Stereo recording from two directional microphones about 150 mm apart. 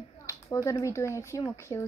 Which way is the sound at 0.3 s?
20° left (ahead or behind).